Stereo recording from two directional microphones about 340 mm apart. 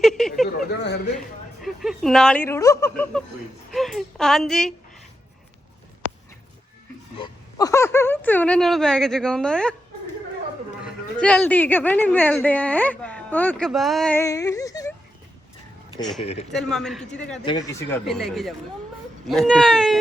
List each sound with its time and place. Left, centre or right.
0.0 s a sound: centre
0.4 s speech: left
1.6 s speech: centre
7.2 s speech: centre
10.8 s speech: centre
16.2 s speech: centre
16.5 s speech: centre